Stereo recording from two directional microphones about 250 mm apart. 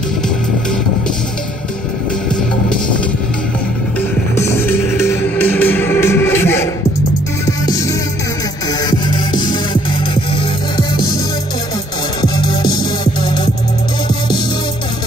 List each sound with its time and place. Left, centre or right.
4.4 s music: centre
8.9 s music: centre
12.2 s music: centre